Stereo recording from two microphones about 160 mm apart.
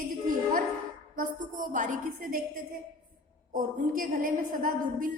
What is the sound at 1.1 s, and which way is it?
A woman's voice, 55° right (ahead or behind).